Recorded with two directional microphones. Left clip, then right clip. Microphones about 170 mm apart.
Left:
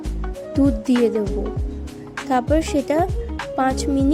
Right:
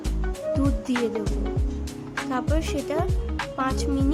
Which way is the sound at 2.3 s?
25° left (ahead or behind).